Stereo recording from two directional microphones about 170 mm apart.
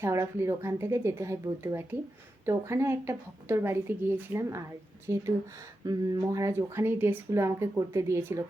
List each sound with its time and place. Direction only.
0.0 s speech: 15° right (ahead or behind)